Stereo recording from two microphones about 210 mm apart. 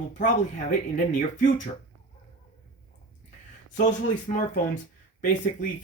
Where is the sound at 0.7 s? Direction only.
35° left (ahead or behind).